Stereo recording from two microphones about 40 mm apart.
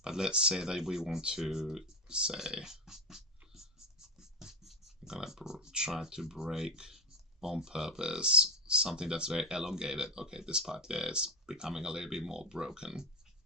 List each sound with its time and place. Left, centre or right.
0.0 s speech: centre
4.2 s a sound: centre
5.5 s speech: centre